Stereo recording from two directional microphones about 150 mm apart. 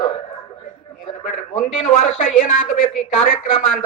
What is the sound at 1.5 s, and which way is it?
A man's voice, 50° left (ahead or behind).